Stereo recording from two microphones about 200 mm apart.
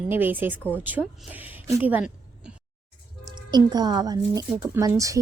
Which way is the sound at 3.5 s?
20° right (ahead or behind).